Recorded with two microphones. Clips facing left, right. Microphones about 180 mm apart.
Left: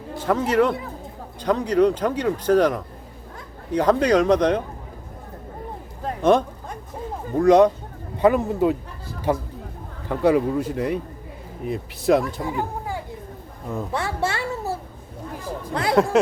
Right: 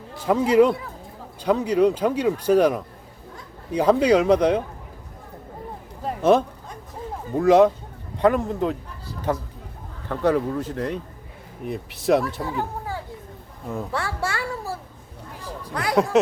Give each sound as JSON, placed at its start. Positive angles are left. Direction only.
{"t": 0.3, "sound": "speech", "side_deg": -10}
{"t": 6.0, "sound": "a sound", "side_deg": -5}
{"t": 7.3, "sound": "speech", "side_deg": -5}
{"t": 12.4, "sound": "speech", "side_deg": 15}
{"t": 13.9, "sound": "a sound", "side_deg": 20}
{"t": 15.7, "sound": "speech", "side_deg": 25}